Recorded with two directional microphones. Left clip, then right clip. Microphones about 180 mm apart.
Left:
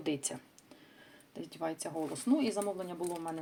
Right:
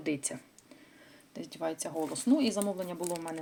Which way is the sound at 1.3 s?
20° right (ahead or behind).